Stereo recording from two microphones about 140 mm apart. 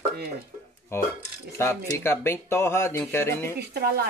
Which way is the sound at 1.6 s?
20° left (ahead or behind).